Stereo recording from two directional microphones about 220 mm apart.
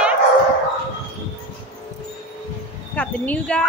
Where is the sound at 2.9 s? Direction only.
5° left (ahead or behind).